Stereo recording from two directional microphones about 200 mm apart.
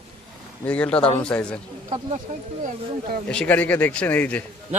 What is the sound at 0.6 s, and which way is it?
Speech, 5° left (ahead or behind).